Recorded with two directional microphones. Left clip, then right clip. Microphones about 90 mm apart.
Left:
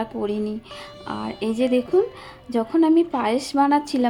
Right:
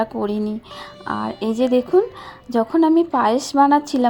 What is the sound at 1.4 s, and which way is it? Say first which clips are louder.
A woman's voice: right 2 dB; 30° right (ahead or behind).